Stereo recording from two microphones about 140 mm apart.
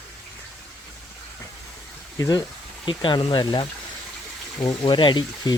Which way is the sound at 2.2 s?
25° left (ahead or behind).